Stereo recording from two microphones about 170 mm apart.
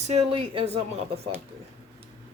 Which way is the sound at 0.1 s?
35° right (ahead or behind).